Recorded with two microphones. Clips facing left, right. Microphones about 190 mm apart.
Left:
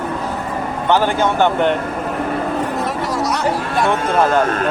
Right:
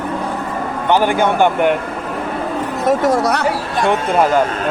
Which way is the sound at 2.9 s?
50° right (ahead or behind).